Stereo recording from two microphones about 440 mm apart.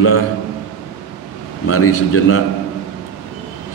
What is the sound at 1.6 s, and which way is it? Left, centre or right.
Speech, left.